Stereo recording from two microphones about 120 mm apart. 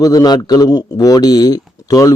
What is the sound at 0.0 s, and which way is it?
Speech, 30° left (ahead or behind).